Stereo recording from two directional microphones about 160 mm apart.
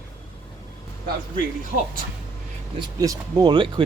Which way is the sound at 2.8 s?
25° right (ahead or behind).